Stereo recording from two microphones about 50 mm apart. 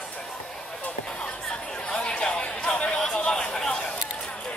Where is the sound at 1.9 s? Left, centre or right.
Centre.